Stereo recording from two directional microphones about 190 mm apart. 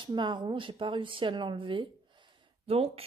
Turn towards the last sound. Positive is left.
turn(degrees=-30)  # may be behind; listen again after turning